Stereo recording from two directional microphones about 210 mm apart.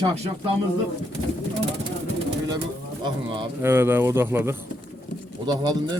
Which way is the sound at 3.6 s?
10° right (ahead or behind).